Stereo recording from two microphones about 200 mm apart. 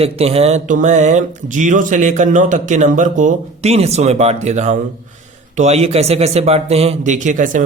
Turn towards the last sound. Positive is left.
turn(degrees=-40)  # may be behind; listen again after turning